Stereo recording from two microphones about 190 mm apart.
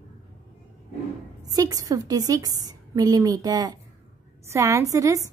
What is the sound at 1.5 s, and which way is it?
A woman's voice, 20° right (ahead or behind).